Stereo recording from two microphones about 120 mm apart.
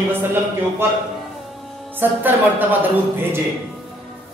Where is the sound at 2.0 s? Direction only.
15° right (ahead or behind).